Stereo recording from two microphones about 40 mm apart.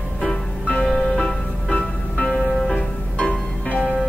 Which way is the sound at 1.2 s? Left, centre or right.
Left.